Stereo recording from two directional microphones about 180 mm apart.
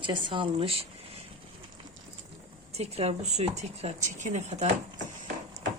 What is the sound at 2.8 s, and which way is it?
Speech, 35° right (ahead or behind).